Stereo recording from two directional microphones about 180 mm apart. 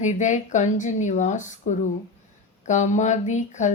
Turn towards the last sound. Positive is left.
turn(degrees=40)  # may be behind; listen again after turning